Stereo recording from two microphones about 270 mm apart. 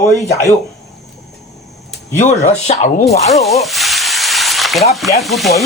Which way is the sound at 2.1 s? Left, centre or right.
Left.